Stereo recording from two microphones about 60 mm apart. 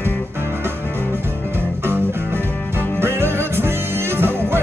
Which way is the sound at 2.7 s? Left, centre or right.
Right.